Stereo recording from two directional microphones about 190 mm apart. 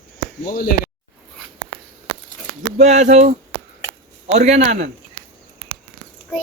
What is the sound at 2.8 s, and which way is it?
Speech, 40° right (ahead or behind).